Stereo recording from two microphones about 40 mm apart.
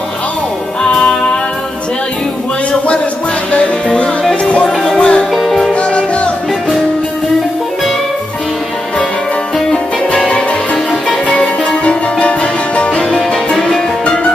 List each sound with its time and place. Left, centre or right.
3.5 s music: centre
5.3 s music: centre
5.7 s music: left
10.1 s music: left
13.1 s music: centre